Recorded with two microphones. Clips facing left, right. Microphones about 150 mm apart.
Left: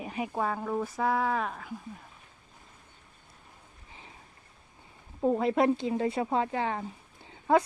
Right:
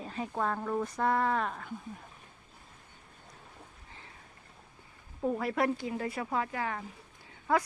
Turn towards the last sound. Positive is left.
turn(degrees=25)  # may be behind; listen again after turning